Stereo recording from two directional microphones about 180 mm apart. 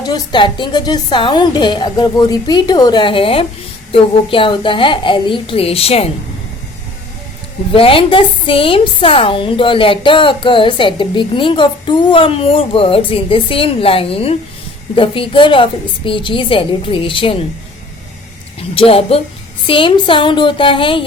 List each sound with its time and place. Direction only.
0.1 s a woman's voice: 25° left (ahead or behind)
7.7 s a woman's voice: 30° left (ahead or behind)
18.7 s a woman's voice: 30° left (ahead or behind)